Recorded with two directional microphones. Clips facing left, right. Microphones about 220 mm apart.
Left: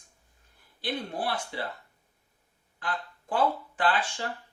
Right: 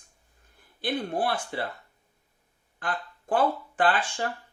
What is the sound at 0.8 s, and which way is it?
Speech, 50° right (ahead or behind).